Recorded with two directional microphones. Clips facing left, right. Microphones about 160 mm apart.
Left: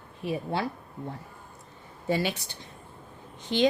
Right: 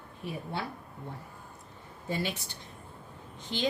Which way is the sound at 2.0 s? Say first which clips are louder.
Left 6 dB; 90° left.